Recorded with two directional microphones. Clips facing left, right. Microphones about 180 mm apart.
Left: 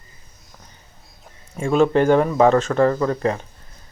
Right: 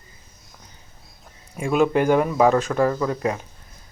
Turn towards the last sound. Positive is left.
turn(degrees=-10)  # may be behind; listen again after turning